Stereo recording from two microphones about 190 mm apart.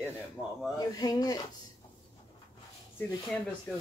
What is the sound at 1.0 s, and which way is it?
Speech, 20° left (ahead or behind).